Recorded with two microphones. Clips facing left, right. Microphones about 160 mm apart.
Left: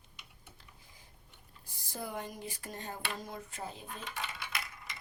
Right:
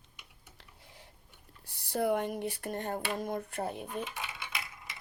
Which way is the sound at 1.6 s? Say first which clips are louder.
Right 12 dB; 70° right (ahead or behind).